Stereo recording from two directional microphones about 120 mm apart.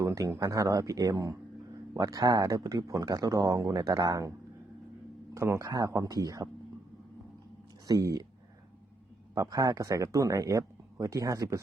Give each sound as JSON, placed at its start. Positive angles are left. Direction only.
{"t": 0.0, "sound": "speech", "side_deg": -25}
{"t": 7.9, "sound": "speech", "side_deg": -30}
{"t": 9.3, "sound": "speech", "side_deg": -30}